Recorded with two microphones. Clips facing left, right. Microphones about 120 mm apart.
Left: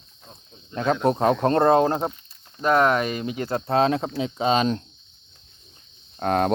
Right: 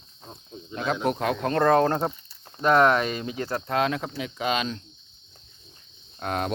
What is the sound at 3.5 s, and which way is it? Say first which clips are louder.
Speech: left 5 dB; 30° left (ahead or behind).